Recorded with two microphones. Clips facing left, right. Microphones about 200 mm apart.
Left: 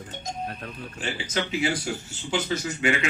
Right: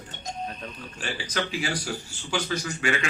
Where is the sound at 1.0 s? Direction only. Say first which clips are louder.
Left 1 dB; 25° left (ahead or behind).